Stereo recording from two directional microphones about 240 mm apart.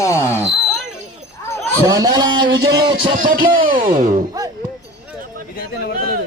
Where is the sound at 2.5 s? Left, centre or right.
Right.